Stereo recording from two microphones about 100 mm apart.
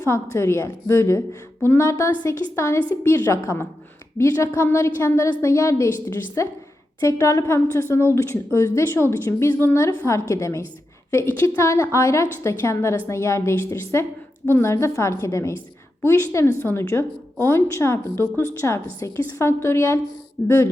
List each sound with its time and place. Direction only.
0.0 s speech: 25° left (ahead or behind)